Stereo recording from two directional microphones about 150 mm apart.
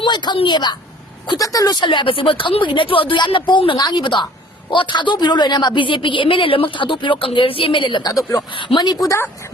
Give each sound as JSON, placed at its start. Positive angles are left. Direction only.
{"t": 0.0, "sound": "a woman's voice", "side_deg": 30}